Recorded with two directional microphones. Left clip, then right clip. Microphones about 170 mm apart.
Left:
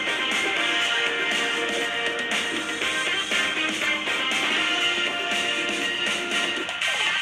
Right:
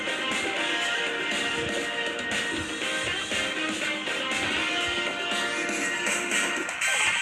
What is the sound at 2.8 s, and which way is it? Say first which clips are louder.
Music: left 5 dB; 20° left (ahead or behind).